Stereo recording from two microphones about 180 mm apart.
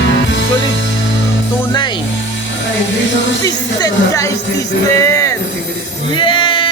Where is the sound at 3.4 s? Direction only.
20° left (ahead or behind).